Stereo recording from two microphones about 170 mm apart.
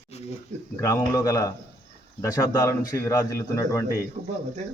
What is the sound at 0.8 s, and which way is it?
Speech, 20° left (ahead or behind).